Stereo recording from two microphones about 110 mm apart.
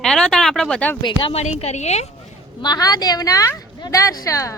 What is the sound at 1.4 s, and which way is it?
Speech, 80° left.